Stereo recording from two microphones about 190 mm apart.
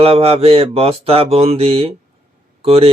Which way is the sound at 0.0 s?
30° right (ahead or behind).